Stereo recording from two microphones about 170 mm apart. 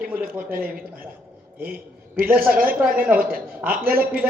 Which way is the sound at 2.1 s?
60° right (ahead or behind).